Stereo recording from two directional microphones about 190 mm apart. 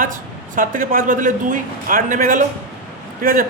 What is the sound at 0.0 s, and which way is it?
A woman's voice, 45° right (ahead or behind).